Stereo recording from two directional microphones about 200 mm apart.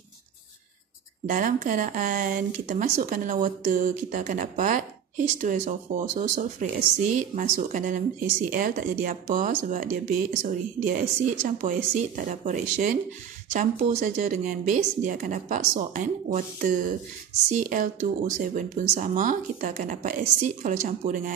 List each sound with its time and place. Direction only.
1.2 s speech: 40° right (ahead or behind)